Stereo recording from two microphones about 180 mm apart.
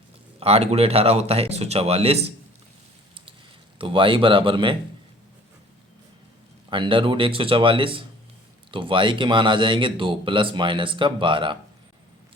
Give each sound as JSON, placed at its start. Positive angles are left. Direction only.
{"t": 0.3, "sound": "speech", "side_deg": -35}
{"t": 3.8, "sound": "speech", "side_deg": -30}
{"t": 6.7, "sound": "speech", "side_deg": -30}